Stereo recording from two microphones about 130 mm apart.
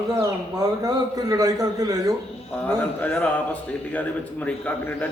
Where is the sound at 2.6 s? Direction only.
15° left (ahead or behind).